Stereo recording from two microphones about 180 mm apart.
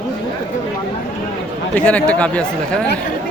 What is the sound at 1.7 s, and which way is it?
Speech, 10° left (ahead or behind).